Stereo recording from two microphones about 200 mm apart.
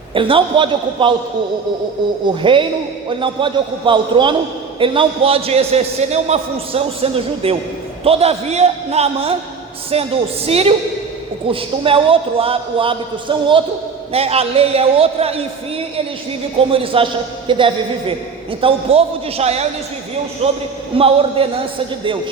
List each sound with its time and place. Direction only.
0.1 s a man's voice: 25° right (ahead or behind)
2.4 s a man's voice: 25° right (ahead or behind)
11.8 s a man's voice: 25° right (ahead or behind)
16.6 s a man's voice: 25° right (ahead or behind)